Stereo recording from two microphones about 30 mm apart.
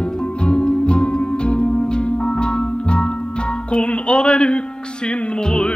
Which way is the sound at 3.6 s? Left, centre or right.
Left.